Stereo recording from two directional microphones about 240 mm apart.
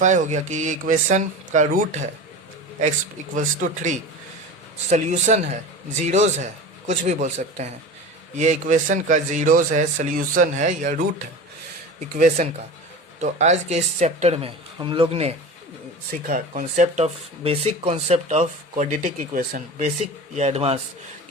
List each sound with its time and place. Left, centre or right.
0.0 s speech: right
3.3 s speech: right
12.1 s speech: right